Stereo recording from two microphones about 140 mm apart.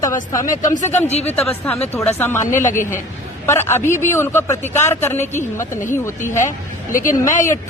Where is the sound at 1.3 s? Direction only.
10° left (ahead or behind).